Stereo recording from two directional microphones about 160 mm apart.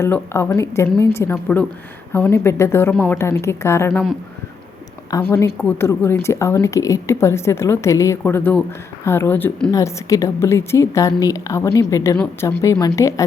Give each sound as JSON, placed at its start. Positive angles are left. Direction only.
{"t": 0.0, "sound": "a woman's voice", "side_deg": 15}
{"t": 5.1, "sound": "a woman's voice", "side_deg": 20}
{"t": 9.7, "sound": "a woman's voice", "side_deg": 20}